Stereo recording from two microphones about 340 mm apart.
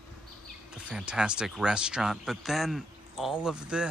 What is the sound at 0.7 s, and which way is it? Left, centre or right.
Speech, centre.